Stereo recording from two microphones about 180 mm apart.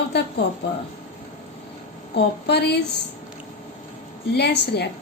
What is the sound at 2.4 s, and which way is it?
Speech, 65° left (ahead or behind).